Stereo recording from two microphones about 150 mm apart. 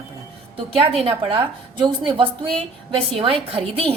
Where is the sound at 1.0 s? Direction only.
40° right (ahead or behind).